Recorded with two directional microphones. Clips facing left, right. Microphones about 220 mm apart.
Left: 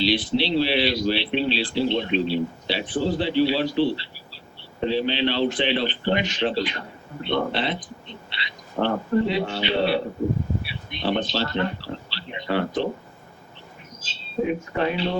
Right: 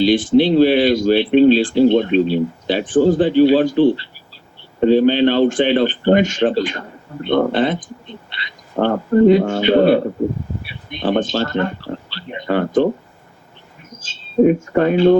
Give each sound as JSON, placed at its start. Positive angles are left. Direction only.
{"t": 0.0, "sound": "a man's voice", "side_deg": -50}
{"t": 14.0, "sound": "speech", "side_deg": -45}